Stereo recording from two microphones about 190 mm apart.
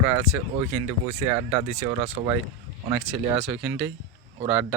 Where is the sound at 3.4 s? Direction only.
10° right (ahead or behind).